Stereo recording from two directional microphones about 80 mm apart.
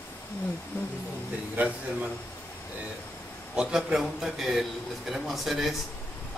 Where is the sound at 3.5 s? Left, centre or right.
Centre.